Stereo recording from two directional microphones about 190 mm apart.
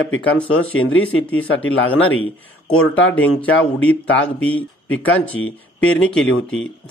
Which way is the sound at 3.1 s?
10° left (ahead or behind).